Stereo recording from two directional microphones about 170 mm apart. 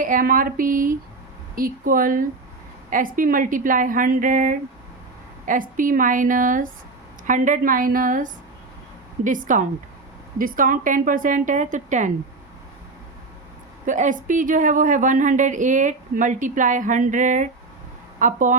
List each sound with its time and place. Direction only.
0.0 s speech: 55° right (ahead or behind)
13.8 s speech: 50° right (ahead or behind)